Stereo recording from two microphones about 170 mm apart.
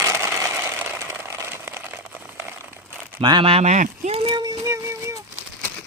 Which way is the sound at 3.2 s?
30° right (ahead or behind).